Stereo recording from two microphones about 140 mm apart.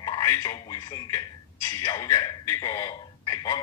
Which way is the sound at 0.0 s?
25° left (ahead or behind).